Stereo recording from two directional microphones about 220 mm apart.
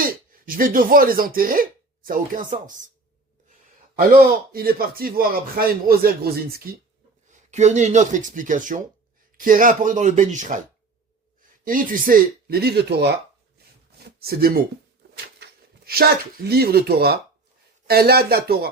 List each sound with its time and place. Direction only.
0.0 s speech: 40° right (ahead or behind)
4.1 s speech: 40° right (ahead or behind)
7.3 s speech: 30° right (ahead or behind)
11.6 s speech: 40° right (ahead or behind)
14.0 s a sound: 45° right (ahead or behind)
16.5 s speech: 45° right (ahead or behind)